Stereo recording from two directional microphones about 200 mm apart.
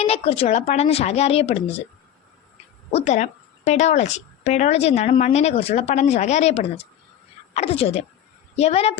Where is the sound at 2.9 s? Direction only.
35° left (ahead or behind).